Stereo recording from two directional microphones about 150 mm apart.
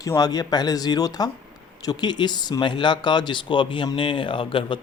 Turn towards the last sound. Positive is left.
turn(degrees=35)  # may be behind; listen again after turning